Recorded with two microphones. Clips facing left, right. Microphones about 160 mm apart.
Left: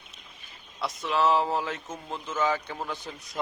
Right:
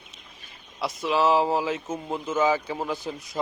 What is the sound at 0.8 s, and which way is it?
Speech, 5° right (ahead or behind).